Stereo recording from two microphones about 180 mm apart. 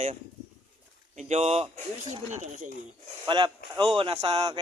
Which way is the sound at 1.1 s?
40° right (ahead or behind).